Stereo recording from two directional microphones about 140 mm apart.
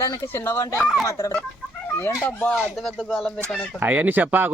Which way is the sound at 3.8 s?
10° right (ahead or behind).